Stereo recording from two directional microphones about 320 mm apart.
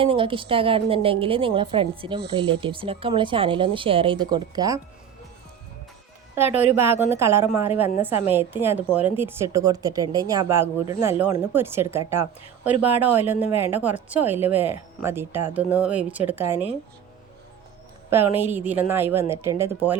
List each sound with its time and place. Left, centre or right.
0.0 s a woman's voice: centre
6.3 s a woman's voice: centre
18.1 s a woman's voice: centre